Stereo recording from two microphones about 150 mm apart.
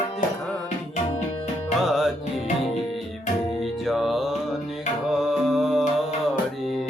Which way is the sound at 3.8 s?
Centre (ahead or behind).